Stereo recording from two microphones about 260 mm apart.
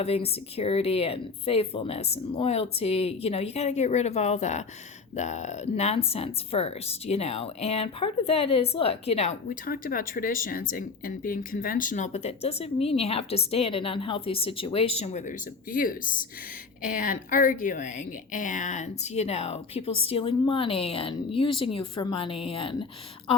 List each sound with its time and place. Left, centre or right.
0.0 s speech: left